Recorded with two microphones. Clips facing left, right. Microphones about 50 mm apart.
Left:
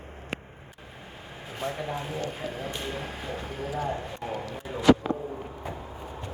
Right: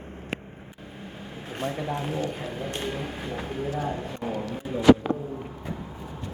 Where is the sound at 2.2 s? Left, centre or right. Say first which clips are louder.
Right 2 dB; centre.